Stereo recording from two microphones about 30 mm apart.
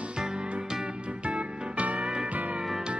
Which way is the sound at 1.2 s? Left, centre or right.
Right.